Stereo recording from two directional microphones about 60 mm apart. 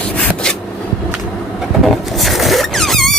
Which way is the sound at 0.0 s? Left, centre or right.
Centre.